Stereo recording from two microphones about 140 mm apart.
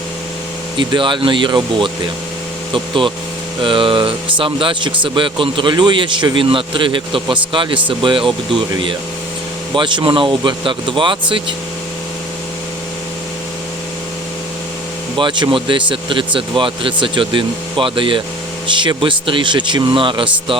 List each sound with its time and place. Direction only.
0.8 s a man's voice: 35° right (ahead or behind)
15.1 s a man's voice: 35° right (ahead or behind)